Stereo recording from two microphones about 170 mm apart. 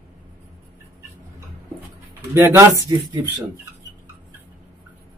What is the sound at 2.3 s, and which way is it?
Speech, 15° right (ahead or behind).